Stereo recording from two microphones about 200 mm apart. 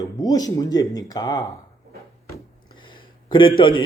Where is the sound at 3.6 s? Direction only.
25° left (ahead or behind).